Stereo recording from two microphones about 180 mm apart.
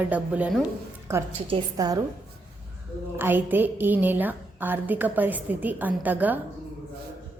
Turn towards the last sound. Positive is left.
turn(degrees=-10)  # may be behind; listen again after turning